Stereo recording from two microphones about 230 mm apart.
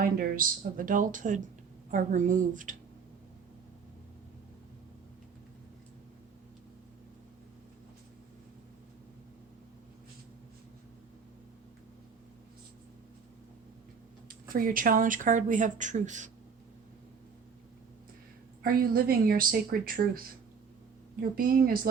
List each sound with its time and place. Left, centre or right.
0.0 s speech: right
14.4 s speech: right
18.6 s speech: right
21.3 s speech: right